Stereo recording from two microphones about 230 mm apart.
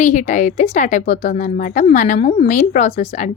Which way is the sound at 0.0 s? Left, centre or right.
Left.